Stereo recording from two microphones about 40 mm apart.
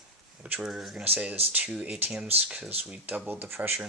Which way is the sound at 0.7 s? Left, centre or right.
Centre.